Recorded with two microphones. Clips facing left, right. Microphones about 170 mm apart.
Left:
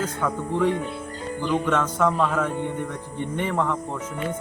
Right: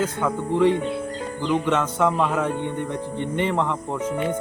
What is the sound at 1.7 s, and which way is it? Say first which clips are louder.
Speech: right 1 dB; 5° right (ahead or behind).